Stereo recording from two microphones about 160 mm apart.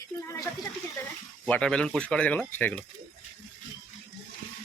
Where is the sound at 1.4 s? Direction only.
5° left (ahead or behind).